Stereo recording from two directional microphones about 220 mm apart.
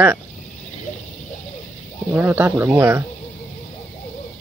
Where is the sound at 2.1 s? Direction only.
10° right (ahead or behind).